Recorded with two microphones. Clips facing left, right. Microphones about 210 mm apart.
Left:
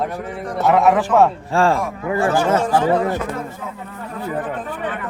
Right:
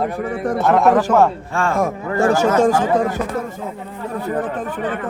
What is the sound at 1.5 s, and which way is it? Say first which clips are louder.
Speech: left 6 dB; 30° left (ahead or behind).